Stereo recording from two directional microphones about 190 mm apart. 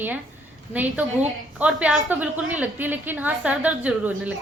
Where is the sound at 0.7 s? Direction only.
10° right (ahead or behind).